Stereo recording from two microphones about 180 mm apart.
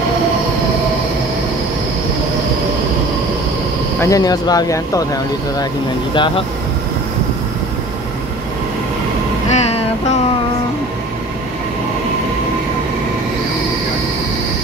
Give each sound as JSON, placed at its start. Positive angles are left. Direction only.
{"t": 4.0, "sound": "speech", "side_deg": 20}
{"t": 9.5, "sound": "vehicle", "side_deg": 35}